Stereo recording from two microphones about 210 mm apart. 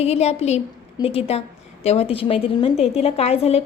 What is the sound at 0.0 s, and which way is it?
A woman's voice, 30° left (ahead or behind).